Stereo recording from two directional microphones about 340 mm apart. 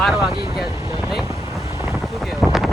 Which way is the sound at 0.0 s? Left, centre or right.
Centre.